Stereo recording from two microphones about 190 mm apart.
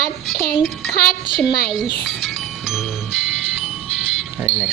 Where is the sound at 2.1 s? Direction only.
Centre (ahead or behind).